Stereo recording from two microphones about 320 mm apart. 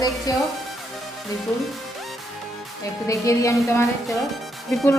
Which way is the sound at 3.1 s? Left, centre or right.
Centre.